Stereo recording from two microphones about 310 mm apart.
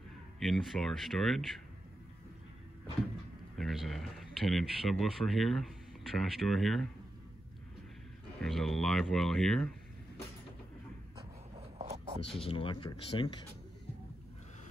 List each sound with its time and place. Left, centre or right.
0.4 s speech: centre
3.5 s speech: centre
8.4 s speech: centre
11.1 s a sound: centre
12.3 s speech: centre